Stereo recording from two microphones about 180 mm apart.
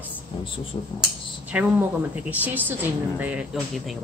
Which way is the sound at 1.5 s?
10° right (ahead or behind).